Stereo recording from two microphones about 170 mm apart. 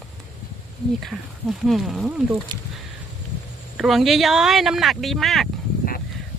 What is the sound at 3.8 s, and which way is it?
Speech, centre (ahead or behind).